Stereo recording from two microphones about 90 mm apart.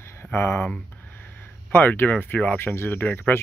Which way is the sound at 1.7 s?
25° left (ahead or behind).